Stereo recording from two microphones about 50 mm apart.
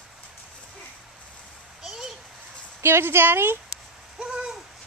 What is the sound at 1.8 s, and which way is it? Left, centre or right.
Children playing, centre.